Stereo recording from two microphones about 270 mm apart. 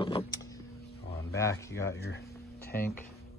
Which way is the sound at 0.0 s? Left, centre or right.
Centre.